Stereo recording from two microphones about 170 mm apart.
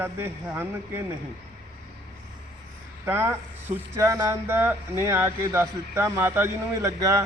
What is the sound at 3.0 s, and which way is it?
Speech, 15° right (ahead or behind).